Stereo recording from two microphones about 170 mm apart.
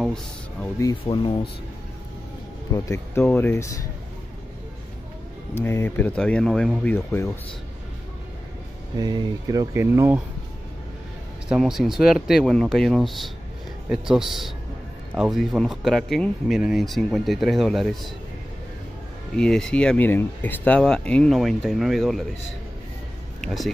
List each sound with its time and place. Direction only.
0.0 s music: 5° left (ahead or behind)
0.7 s speech: 25° left (ahead or behind)
2.7 s speech: 15° left (ahead or behind)
5.5 s speech: 15° left (ahead or behind)
8.9 s speech: 25° right (ahead or behind)
11.4 s speech: 5° right (ahead or behind)
19.3 s speech: 5° left (ahead or behind)
23.4 s speech: centre (ahead or behind)